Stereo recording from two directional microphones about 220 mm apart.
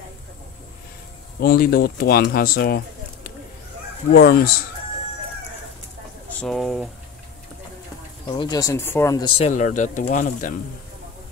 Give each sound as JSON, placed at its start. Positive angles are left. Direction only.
{"t": 1.4, "sound": "speech", "side_deg": 45}
{"t": 4.1, "sound": "speech", "side_deg": 45}
{"t": 6.4, "sound": "speech", "side_deg": 0}
{"t": 8.3, "sound": "speech", "side_deg": 20}